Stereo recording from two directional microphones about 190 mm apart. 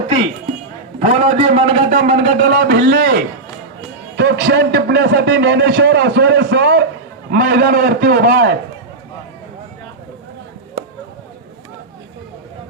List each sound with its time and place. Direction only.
1.0 s a man's voice: 35° right (ahead or behind)
2.4 s a man's voice: 55° right (ahead or behind)
4.2 s a man's voice: 60° right (ahead or behind)
10.8 s a sound: 50° right (ahead or behind)